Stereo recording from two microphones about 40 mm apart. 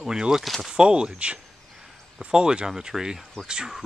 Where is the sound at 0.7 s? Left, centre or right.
Right.